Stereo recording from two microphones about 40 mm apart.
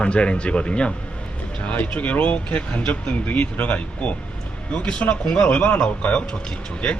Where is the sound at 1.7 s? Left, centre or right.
Left.